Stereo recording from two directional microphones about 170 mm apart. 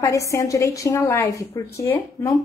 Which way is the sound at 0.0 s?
20° left (ahead or behind).